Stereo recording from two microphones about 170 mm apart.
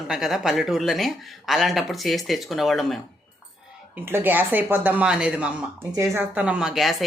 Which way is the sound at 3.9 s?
10° right (ahead or behind).